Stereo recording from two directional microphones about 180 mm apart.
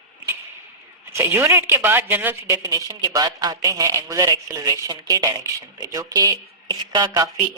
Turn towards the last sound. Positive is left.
turn(degrees=-20)  # may be behind; listen again after turning